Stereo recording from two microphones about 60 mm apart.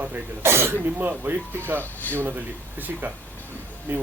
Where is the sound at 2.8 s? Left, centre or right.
Right.